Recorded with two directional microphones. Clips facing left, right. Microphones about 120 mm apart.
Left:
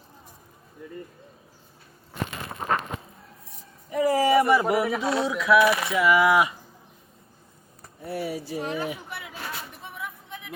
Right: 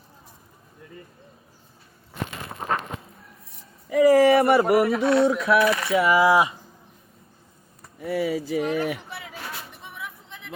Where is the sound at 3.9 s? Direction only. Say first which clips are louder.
Right 5 dB; 85° right; by 4.7 s 55° right (ahead or behind).